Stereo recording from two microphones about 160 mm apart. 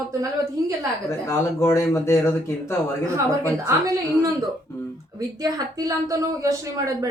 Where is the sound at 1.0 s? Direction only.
15° left (ahead or behind).